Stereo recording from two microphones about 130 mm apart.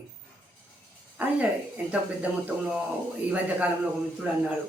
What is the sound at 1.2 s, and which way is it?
Speech, 15° right (ahead or behind).